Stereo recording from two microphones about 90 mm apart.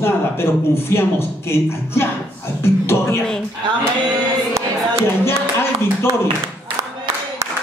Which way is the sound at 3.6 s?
60° right (ahead or behind).